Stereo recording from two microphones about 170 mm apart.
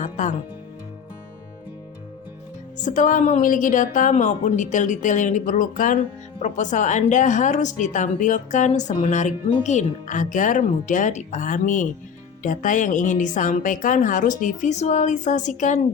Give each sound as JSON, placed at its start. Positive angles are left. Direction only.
{"t": 0.0, "sound": "music", "side_deg": 45}
{"t": 2.8, "sound": "a woman's voice", "side_deg": 50}